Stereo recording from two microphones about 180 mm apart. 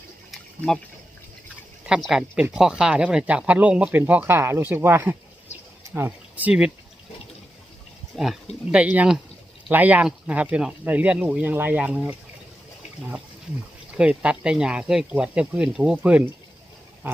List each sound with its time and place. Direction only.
0.3 s a sound: centre (ahead or behind)
1.9 s speech: centre (ahead or behind)
8.1 s speech: centre (ahead or behind)
13.9 s speech: 5° right (ahead or behind)